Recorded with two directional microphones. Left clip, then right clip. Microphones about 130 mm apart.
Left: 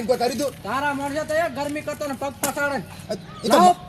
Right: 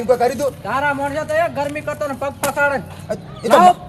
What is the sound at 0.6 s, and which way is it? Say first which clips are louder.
A man's voice: right 6 dB; 5° left (ahead or behind).